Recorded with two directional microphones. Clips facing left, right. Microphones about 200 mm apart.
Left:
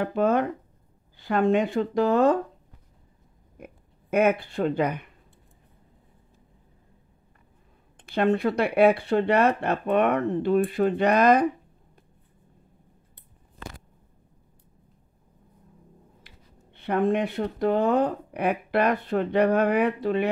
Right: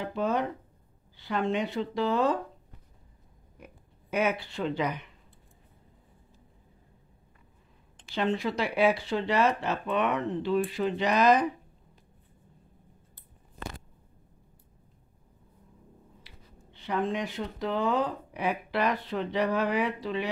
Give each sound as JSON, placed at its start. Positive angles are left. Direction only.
{"t": 0.0, "sound": "speech", "side_deg": 55}
{"t": 3.5, "sound": "speech", "side_deg": 50}
{"t": 8.0, "sound": "speech", "side_deg": 60}
{"t": 16.2, "sound": "speech", "side_deg": 55}